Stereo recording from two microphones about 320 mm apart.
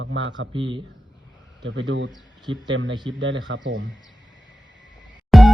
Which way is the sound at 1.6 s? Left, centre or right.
Right.